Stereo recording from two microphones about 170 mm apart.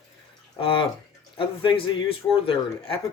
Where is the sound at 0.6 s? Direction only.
30° left (ahead or behind).